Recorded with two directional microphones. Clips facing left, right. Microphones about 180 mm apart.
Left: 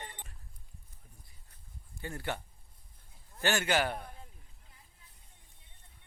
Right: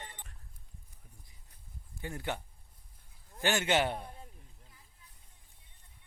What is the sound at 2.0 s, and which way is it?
A man's voice, 15° right (ahead or behind).